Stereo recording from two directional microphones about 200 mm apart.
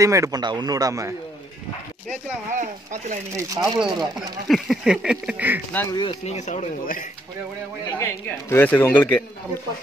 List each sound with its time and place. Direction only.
0.0 s a man's voice: 15° right (ahead or behind)
2.5 s speech: 40° right (ahead or behind)
3.3 s a man's voice: 15° right (ahead or behind)
4.5 s a sound: centre (ahead or behind)
5.7 s speech: 10° left (ahead or behind)
5.9 s speech: 30° left (ahead or behind)
8.0 s speech: 15° left (ahead or behind)